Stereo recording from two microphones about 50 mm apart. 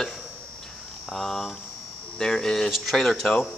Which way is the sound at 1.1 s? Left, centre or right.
Centre.